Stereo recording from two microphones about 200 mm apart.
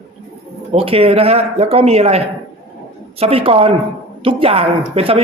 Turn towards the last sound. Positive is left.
turn(degrees=-30)  # may be behind; listen again after turning